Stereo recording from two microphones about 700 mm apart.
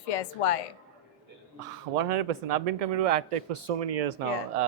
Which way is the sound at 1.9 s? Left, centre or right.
Right.